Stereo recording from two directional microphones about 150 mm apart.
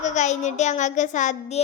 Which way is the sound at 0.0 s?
50° left (ahead or behind).